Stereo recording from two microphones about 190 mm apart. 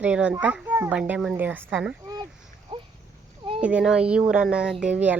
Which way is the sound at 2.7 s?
25° right (ahead or behind).